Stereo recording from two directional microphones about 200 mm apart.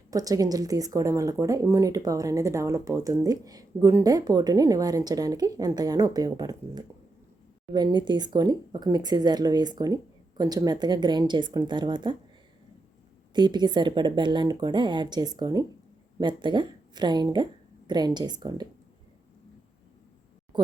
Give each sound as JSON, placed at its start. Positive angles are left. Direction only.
{"t": 0.1, "sound": "speech", "side_deg": -15}
{"t": 13.3, "sound": "a woman's voice", "side_deg": -20}